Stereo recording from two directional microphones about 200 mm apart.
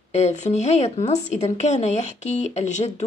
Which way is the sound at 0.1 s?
35° left (ahead or behind).